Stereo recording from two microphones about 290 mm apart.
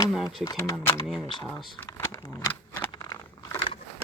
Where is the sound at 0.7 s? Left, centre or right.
Centre.